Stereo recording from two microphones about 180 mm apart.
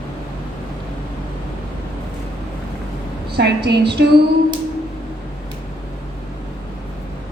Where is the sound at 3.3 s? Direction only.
70° right (ahead or behind).